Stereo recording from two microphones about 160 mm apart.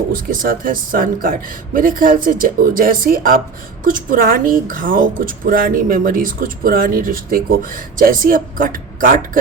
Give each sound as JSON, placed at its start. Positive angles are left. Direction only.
{"t": 0.1, "sound": "speech", "side_deg": -60}